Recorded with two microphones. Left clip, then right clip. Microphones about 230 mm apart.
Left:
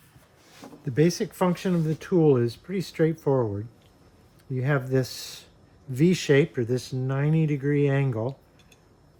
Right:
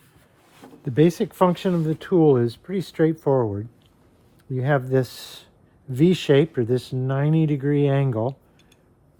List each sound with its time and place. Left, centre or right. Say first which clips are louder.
0.9 s speech: right 4 dB; right